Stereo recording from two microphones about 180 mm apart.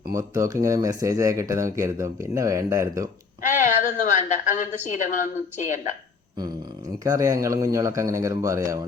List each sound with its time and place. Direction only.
0.1 s speech: 15° right (ahead or behind)
3.4 s a woman's voice: 45° left (ahead or behind)
7.0 s speech: 20° right (ahead or behind)